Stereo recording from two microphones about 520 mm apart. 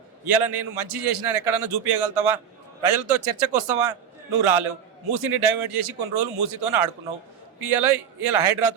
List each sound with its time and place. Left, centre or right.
0.3 s a man's voice: right